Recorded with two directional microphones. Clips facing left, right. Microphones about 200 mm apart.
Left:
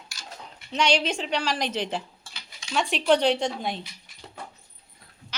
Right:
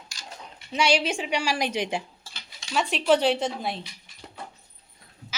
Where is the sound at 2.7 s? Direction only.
Centre (ahead or behind).